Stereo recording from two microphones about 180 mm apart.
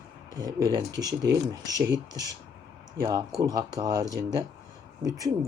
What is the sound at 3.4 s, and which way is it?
Speech, 20° right (ahead or behind).